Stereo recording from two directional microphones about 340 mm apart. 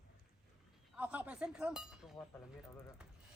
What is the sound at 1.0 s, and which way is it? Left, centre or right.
Speech, centre.